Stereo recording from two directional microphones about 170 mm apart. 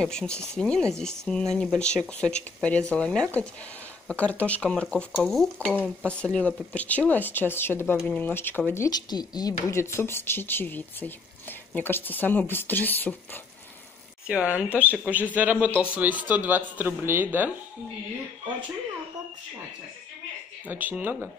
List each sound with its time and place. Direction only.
0.0 s speech: 5° left (ahead or behind)
14.2 s speech: 5° right (ahead or behind)
20.6 s speech: 10° right (ahead or behind)